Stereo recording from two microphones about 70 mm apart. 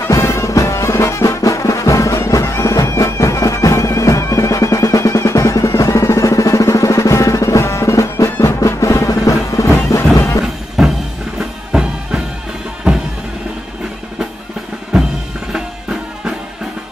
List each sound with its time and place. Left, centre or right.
0.1 s music: left
10.8 s music: centre
15.5 s drum: centre